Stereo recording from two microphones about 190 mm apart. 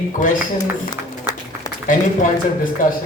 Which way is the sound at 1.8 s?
45° left (ahead or behind).